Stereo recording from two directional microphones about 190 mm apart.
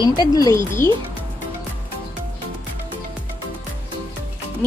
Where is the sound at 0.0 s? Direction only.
20° left (ahead or behind).